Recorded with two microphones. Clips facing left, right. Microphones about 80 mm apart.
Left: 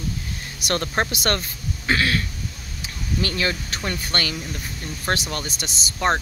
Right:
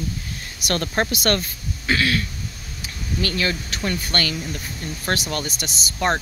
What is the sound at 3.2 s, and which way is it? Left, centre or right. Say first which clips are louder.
Speech: right 1 dB; left.